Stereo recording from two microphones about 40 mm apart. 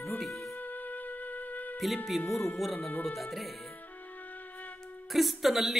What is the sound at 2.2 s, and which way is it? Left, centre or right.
Speech, left.